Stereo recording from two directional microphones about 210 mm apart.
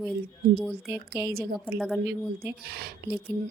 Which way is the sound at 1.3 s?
45° right (ahead or behind).